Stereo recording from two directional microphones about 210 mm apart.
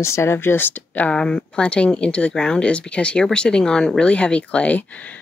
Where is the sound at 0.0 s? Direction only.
15° left (ahead or behind).